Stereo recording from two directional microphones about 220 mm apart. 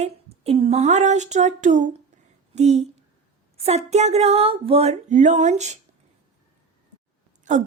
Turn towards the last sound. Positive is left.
turn(degrees=-35)  # may be behind; listen again after turning